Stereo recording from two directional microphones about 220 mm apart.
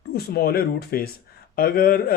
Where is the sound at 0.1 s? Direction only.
45° left (ahead or behind).